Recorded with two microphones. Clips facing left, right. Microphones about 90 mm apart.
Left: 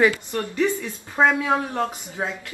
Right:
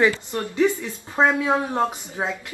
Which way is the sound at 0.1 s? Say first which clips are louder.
Even; 20° right (ahead or behind).